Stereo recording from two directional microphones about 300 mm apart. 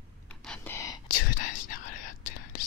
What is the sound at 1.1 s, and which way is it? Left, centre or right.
Whispering, left.